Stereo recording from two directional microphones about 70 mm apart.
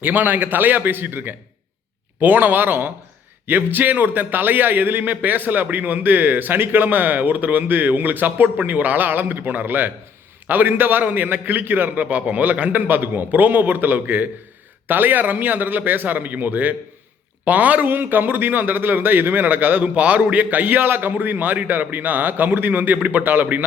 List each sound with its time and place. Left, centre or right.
0.0 s a man's voice: right